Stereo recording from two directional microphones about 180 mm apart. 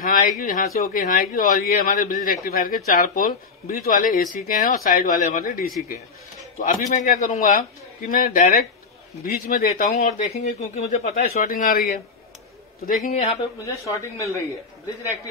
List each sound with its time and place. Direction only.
0.0 s a man's voice: 50° left (ahead or behind)
5.4 s speech: 55° left (ahead or behind)
6.6 s a man's voice: 40° left (ahead or behind)
9.9 s speech: 40° left (ahead or behind)
11.3 s a man's voice: 50° left (ahead or behind)
13.0 s speech: 35° left (ahead or behind)
13.6 s speech: 15° left (ahead or behind)